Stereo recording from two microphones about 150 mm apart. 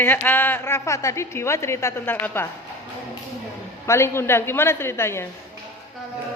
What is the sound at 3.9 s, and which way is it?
A woman's voice, 15° left (ahead or behind).